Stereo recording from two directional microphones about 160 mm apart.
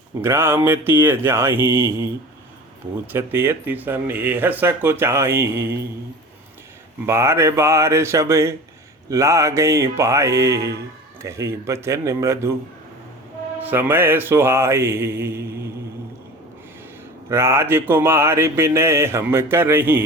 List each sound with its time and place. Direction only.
0.2 s mantra: 15° right (ahead or behind)
7.0 s mantra: 15° right (ahead or behind)
13.6 s mantra: 10° right (ahead or behind)
17.2 s mantra: 15° right (ahead or behind)